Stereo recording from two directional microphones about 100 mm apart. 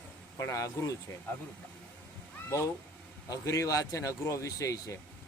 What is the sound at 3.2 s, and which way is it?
Speech, 35° left (ahead or behind).